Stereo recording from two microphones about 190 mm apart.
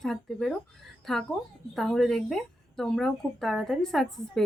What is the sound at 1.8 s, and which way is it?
Speech, centre (ahead or behind).